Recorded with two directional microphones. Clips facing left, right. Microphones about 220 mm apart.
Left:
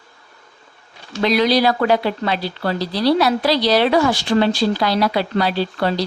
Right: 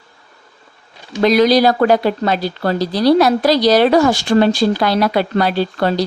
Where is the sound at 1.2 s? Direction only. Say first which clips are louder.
Right 5 dB; 45° right (ahead or behind).